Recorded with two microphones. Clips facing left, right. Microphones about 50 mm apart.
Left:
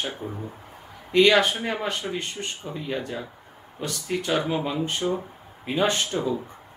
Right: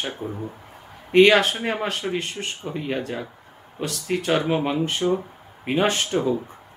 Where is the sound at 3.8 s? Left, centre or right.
Right.